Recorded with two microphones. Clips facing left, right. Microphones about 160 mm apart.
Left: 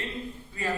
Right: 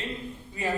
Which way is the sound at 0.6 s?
20° right (ahead or behind).